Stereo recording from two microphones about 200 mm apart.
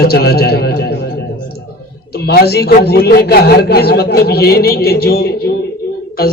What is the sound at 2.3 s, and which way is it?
Speech, 55° left (ahead or behind).